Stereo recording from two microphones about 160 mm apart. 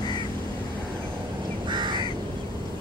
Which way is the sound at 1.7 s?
30° right (ahead or behind).